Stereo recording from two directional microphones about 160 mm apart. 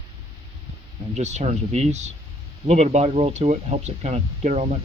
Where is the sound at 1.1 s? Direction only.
45° right (ahead or behind).